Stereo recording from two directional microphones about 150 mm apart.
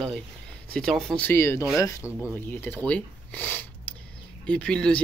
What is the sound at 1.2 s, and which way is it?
Speech, 15° left (ahead or behind).